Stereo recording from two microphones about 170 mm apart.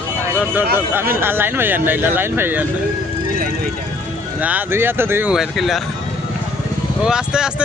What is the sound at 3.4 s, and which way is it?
Vehicle, 60° right (ahead or behind).